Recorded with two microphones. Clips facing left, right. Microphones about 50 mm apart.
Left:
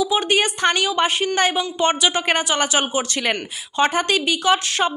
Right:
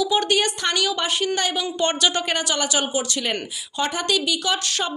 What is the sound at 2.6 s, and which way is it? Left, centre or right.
A woman's voice, left.